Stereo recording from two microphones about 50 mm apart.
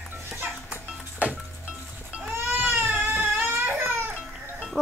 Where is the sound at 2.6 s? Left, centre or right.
Right.